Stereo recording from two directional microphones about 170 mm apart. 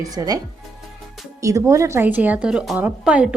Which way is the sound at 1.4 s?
20° right (ahead or behind).